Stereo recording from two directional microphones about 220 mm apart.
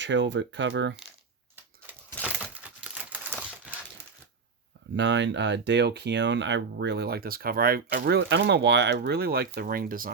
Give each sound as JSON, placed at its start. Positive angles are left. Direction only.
{"t": 0.0, "sound": "speech", "side_deg": -55}
{"t": 2.4, "sound": "crumpling", "side_deg": -5}
{"t": 4.9, "sound": "speech", "side_deg": -55}